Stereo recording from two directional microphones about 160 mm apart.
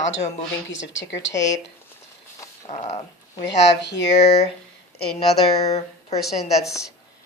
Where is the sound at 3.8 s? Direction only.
90° left.